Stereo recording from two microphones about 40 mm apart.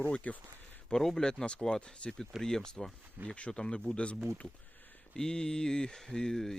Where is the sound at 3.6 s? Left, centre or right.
Left.